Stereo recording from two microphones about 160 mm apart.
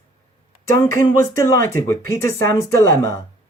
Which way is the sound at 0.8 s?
15° left (ahead or behind).